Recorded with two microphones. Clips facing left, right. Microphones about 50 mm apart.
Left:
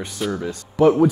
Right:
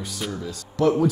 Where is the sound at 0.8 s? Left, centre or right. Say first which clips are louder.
Left 5 dB; centre.